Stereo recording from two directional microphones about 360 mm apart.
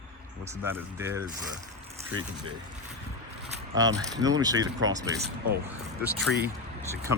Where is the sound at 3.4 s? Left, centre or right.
Centre.